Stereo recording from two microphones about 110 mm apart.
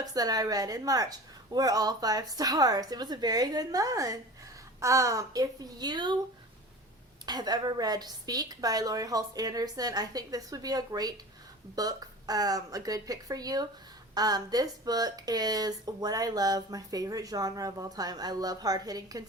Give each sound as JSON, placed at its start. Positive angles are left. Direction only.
{"t": 0.0, "sound": "speech", "side_deg": -35}
{"t": 7.3, "sound": "speech", "side_deg": -35}